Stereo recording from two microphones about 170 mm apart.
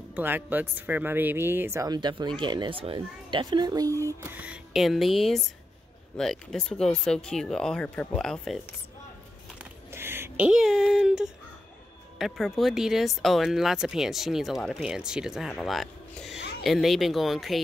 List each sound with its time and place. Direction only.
0.1 s speech: 10° right (ahead or behind)
9.6 s a sound: 15° right (ahead or behind)
12.2 s speech: centre (ahead or behind)